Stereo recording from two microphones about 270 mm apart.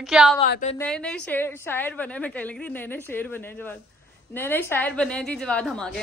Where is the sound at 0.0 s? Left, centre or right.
Centre.